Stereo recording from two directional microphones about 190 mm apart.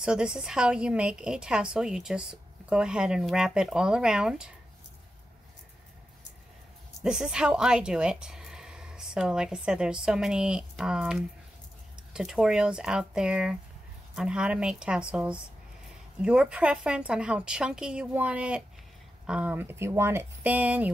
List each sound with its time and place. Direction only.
0.0 s a woman's voice: 5° right (ahead or behind)
7.0 s a woman's voice: 5° right (ahead or behind)